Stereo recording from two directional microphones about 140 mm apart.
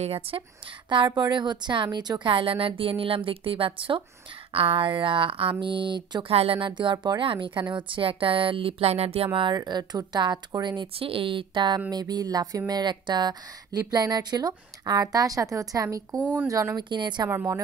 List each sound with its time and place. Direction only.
0.0 s a woman's voice: 45° right (ahead or behind)
0.8 s a woman's voice: 35° right (ahead or behind)